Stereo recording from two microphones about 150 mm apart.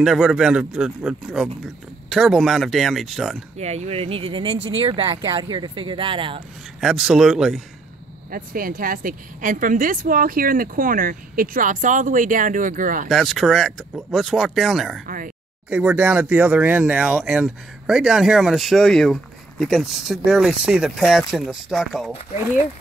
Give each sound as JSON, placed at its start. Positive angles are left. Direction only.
{"t": 0.0, "sound": "speech", "side_deg": -5}
{"t": 3.5, "sound": "speech", "side_deg": -45}
{"t": 6.8, "sound": "speech", "side_deg": -5}
{"t": 8.3, "sound": "speech", "side_deg": -70}
{"t": 13.1, "sound": "speech", "side_deg": 0}
{"t": 15.0, "sound": "speech", "side_deg": -65}
{"t": 15.7, "sound": "speech", "side_deg": -5}